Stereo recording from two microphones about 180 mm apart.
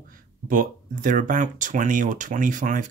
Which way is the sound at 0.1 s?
50° right (ahead or behind).